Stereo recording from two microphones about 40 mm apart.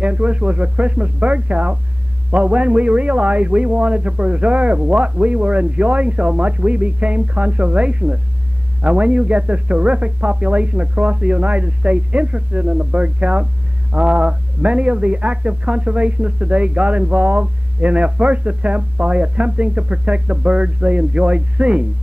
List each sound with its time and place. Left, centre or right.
0.0 s a man's voice: right